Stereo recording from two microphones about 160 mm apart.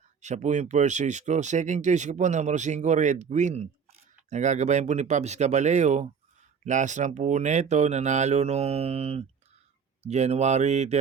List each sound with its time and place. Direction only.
0.2 s speech: 45° right (ahead or behind)